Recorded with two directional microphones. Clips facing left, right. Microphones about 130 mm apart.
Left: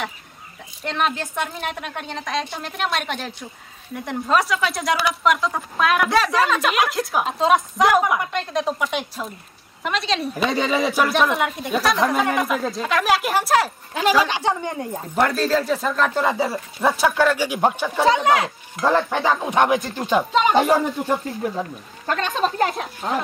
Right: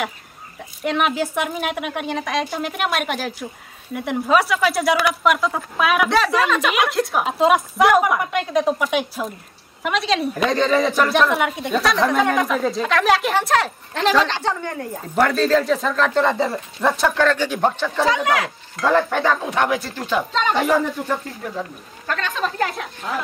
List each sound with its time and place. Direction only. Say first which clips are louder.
0.8 s a woman's voice: right 4 dB; 5° right (ahead or behind); by 15.2 s 20° left (ahead or behind)
15.2 s a woman's voice: right 3 dB; 5° left (ahead or behind)
18.0 s speech: left 3 dB; 25° left (ahead or behind)
18.9 s speech: right 1 dB; 10° left (ahead or behind)